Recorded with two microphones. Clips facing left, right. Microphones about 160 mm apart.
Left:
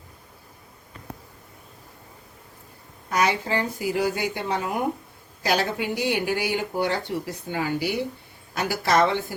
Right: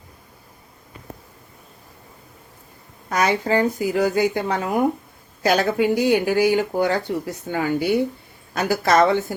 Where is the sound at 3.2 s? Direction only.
50° right (ahead or behind).